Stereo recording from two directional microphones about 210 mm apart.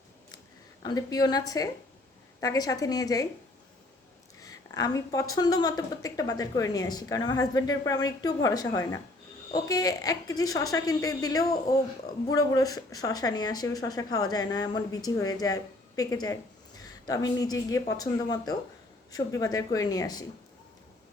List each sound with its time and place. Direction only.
0.8 s speech: 20° left (ahead or behind)
4.4 s speech: 15° left (ahead or behind)